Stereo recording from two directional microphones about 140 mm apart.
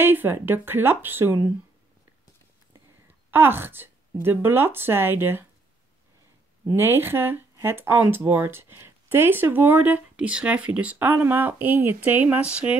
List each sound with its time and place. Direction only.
0.0 s speech: 15° right (ahead or behind)
3.3 s speech: 15° right (ahead or behind)
6.7 s speech: 15° right (ahead or behind)